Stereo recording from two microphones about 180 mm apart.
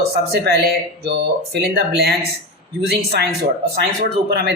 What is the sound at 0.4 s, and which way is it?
Speech, 60° right (ahead or behind).